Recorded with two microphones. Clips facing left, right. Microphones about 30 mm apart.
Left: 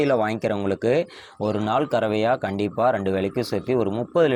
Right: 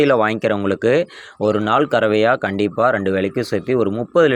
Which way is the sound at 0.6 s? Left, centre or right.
Right.